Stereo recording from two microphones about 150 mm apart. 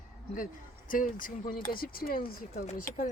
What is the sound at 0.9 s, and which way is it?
Speech, 65° left (ahead or behind).